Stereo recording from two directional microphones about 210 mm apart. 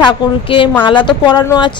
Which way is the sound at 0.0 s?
25° left (ahead or behind).